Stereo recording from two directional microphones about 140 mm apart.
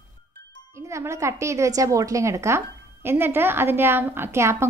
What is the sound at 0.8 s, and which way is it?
A woman's voice, 20° right (ahead or behind).